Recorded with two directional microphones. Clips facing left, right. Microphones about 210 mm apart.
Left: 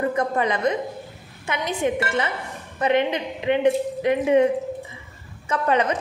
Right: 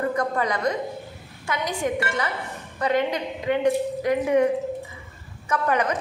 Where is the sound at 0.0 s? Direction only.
25° left (ahead or behind).